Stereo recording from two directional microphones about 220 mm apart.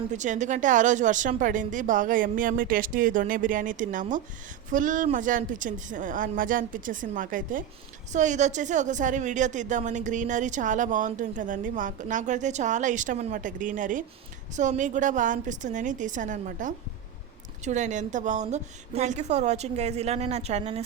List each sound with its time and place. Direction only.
0.1 s a woman's voice: 35° right (ahead or behind)